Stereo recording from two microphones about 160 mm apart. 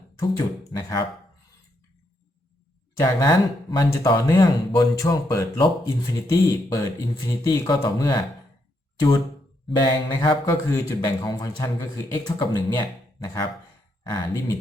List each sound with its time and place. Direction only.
0.2 s speech: 20° left (ahead or behind)
3.0 s speech: 25° left (ahead or behind)
9.6 s speech: 25° left (ahead or behind)